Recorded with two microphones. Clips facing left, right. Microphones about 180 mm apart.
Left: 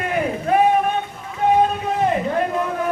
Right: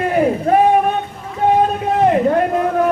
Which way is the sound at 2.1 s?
50° right (ahead or behind).